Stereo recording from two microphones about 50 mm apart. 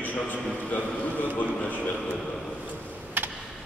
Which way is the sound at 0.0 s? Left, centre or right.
Left.